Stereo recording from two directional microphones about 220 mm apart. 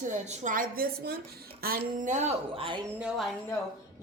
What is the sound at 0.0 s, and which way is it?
Speech, 35° right (ahead or behind).